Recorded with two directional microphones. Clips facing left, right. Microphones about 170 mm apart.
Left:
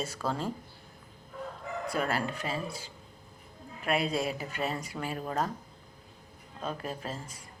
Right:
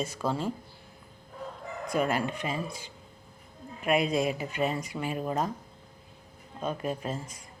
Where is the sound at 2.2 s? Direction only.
35° left (ahead or behind).